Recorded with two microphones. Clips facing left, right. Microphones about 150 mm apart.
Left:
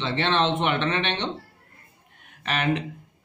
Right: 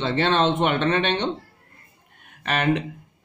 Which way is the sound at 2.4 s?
50° right (ahead or behind).